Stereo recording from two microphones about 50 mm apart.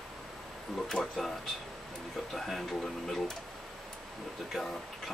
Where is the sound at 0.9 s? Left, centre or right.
Centre.